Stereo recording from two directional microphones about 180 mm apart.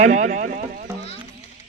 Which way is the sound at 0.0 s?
40° right (ahead or behind).